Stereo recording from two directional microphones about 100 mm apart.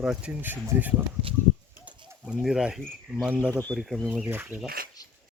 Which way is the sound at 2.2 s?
5° right (ahead or behind).